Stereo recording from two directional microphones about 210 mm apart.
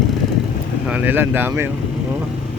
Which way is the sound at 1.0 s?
10° right (ahead or behind).